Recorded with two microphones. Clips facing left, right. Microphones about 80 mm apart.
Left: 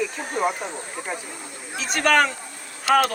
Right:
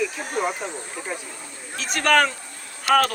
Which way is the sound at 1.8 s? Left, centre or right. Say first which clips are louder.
Even; centre.